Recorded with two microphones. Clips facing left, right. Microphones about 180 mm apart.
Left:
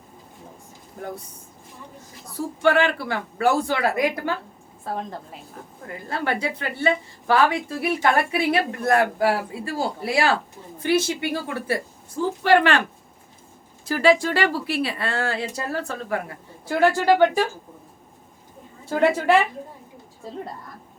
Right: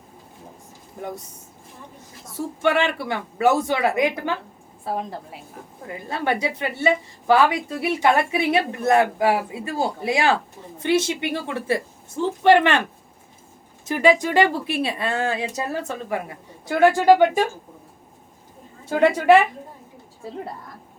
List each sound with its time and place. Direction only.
2.6 s a woman's voice: 20° right (ahead or behind)
6.1 s a woman's voice: 20° right (ahead or behind)
13.8 s speech: 20° right (ahead or behind)
18.9 s a woman's voice: 20° right (ahead or behind)